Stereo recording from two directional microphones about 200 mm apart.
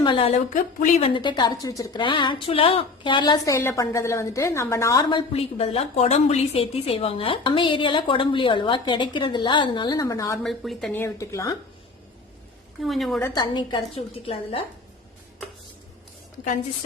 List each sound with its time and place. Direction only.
0.0 s a woman's voice: 25° left (ahead or behind)
10.4 s speech: centre (ahead or behind); by 11.5 s 15° left (ahead or behind)
12.8 s speech: centre (ahead or behind)
13.3 s a woman's voice: 20° left (ahead or behind)